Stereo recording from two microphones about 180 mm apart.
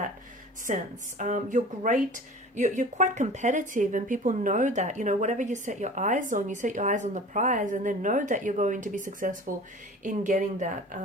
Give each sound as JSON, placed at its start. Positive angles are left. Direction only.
{"t": 0.7, "sound": "speech", "side_deg": -45}